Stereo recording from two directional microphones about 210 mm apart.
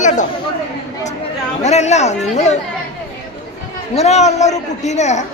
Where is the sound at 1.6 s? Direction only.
30° left (ahead or behind).